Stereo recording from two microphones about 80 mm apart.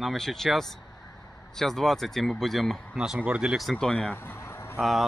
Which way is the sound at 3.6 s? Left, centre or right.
Centre.